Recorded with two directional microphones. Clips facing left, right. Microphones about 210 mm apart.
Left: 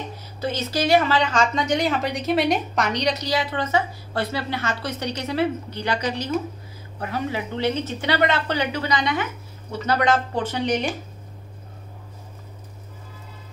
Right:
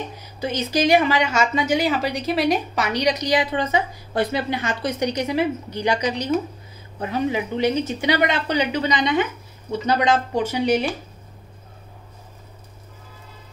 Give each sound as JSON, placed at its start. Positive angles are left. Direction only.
{"t": 0.2, "sound": "speech", "side_deg": -15}